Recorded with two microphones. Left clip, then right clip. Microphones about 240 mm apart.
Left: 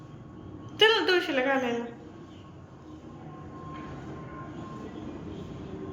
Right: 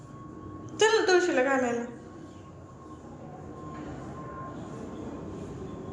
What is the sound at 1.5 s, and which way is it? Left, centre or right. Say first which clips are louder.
Speech: right 1 dB; right.